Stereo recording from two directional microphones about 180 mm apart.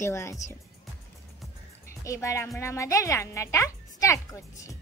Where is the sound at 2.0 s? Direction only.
15° left (ahead or behind).